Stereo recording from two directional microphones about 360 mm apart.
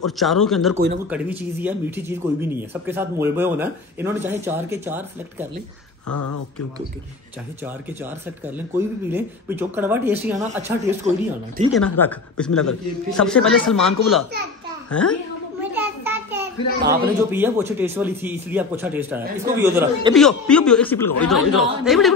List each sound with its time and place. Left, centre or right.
0.0 s speech: centre
0.7 s speech: right
1.1 s speech: centre
6.0 s speech: left
8.7 s speech: centre
11.1 s speech: centre
11.7 s speech: centre
15.7 s a sound: centre
17.3 s speech: centre
20.2 s speech: centre